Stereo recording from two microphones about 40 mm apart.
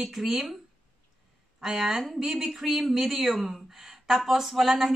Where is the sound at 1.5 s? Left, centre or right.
Centre.